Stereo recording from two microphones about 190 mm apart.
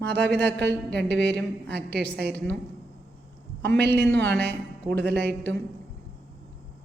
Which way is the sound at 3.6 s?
60° right (ahead or behind).